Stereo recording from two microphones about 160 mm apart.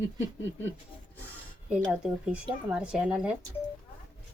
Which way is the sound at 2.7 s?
5° right (ahead or behind).